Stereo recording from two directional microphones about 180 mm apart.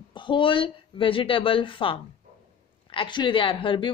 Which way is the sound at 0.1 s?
25° left (ahead or behind).